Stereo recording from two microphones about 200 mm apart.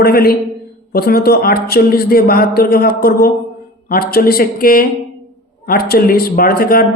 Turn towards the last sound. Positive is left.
turn(degrees=45)  # may be behind; listen again after turning